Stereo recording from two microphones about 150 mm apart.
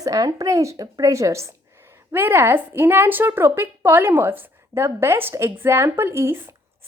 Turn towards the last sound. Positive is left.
turn(degrees=-15)  # may be behind; listen again after turning